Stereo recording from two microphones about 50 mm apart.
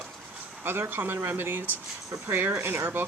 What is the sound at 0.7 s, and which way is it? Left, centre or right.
Speech, right.